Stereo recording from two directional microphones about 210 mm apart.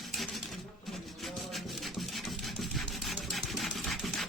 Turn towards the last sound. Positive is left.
turn(degrees=0)  # may be behind; listen again after turning